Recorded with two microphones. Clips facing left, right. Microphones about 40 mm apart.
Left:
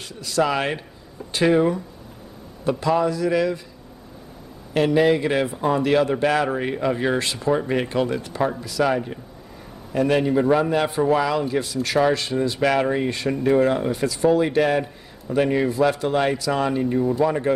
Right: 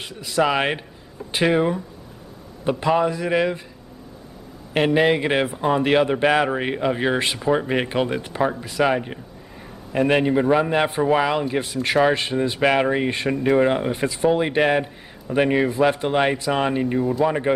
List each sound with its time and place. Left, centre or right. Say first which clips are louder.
0.0 s a man's voice: right 1 dB; right
4.7 s a man's voice: even; right
10.4 s a man's voice: even; centre
10.7 s a man's voice: even; right